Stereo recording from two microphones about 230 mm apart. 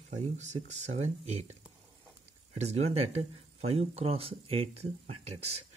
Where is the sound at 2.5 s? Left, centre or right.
Right.